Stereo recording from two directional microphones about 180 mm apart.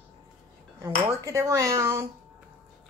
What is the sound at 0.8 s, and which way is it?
Speech, 15° right (ahead or behind).